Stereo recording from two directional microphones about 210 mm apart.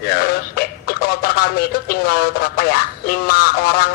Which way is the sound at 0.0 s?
45° left (ahead or behind).